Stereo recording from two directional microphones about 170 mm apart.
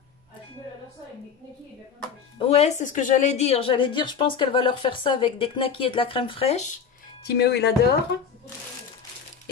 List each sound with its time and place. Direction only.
2.3 s a woman's voice: 35° left (ahead or behind)
2.8 s a woman's voice: 50° left (ahead or behind)
7.2 s speech: 75° left (ahead or behind)